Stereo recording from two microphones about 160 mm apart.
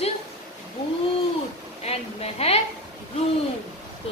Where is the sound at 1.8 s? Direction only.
40° left (ahead or behind).